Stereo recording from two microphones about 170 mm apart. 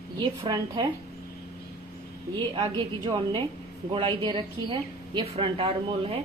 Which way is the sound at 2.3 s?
30° right (ahead or behind).